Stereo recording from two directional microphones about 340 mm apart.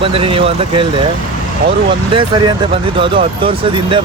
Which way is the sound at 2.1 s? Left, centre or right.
Centre.